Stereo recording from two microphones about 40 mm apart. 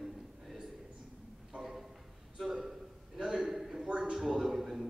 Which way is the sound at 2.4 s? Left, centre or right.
Centre.